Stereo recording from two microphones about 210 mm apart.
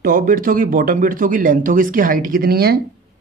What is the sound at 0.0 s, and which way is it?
Speech, 45° right (ahead or behind).